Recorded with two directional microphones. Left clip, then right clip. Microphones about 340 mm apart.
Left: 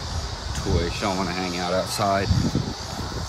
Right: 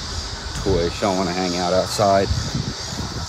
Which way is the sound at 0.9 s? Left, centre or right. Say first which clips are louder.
Right 5 dB; centre.